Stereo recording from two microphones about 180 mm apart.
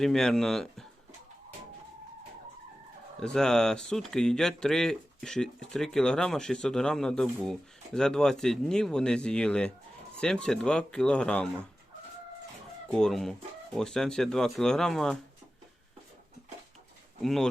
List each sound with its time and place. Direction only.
0.0 s speech: 5° left (ahead or behind)
3.2 s speech: 5° left (ahead or behind)
12.9 s speech: centre (ahead or behind)
17.2 s speech: centre (ahead or behind)